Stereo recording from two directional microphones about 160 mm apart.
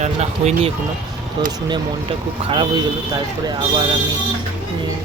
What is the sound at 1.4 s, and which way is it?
Speech, 30° right (ahead or behind).